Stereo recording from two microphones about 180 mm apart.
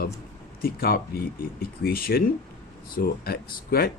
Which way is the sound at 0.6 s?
55° left (ahead or behind).